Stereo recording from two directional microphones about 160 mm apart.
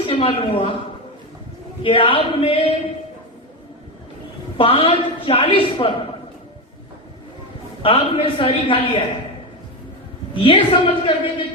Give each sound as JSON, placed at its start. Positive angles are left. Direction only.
{"t": 0.0, "sound": "a woman's voice", "side_deg": 30}
{"t": 1.8, "sound": "a woman's voice", "side_deg": 35}
{"t": 4.5, "sound": "a woman's voice", "side_deg": 35}
{"t": 7.8, "sound": "a woman's voice", "side_deg": 35}
{"t": 10.4, "sound": "a woman's voice", "side_deg": 35}